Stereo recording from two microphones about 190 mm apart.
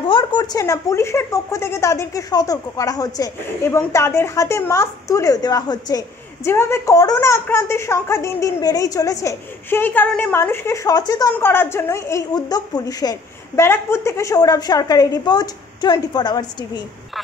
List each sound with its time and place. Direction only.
0.1 s speech: 25° left (ahead or behind)